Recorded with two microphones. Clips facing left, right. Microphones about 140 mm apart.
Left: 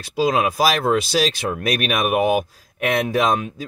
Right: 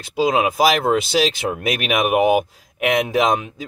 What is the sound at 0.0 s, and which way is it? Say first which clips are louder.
Speech: right 1 dB; 20° right (ahead or behind).